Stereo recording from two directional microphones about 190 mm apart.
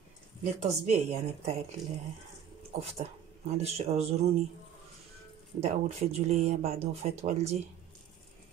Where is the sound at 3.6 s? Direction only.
35° right (ahead or behind).